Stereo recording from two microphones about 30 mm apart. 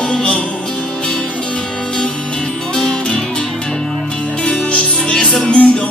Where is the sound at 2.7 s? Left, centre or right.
Left.